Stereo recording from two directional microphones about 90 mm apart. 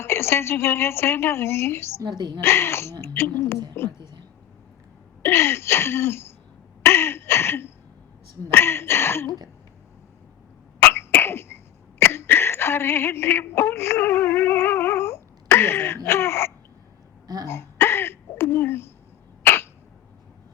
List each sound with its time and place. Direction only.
0.0 s a woman's voice: 25° left (ahead or behind)
2.0 s a woman's voice: 50° right (ahead or behind)
2.4 s a woman's voice: 30° left (ahead or behind)
3.8 s a sound: 35° left (ahead or behind)
5.2 s throat clearing: 25° left (ahead or behind)
8.4 s speech: 30° left (ahead or behind)
10.9 s sneeze: 25° left (ahead or behind)
17.2 s hiccup: 50° right (ahead or behind)
17.5 s throat clearing: 30° left (ahead or behind)
19.4 s cough: 25° left (ahead or behind)